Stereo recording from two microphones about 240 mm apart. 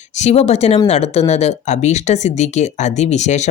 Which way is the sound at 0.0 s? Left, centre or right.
Left.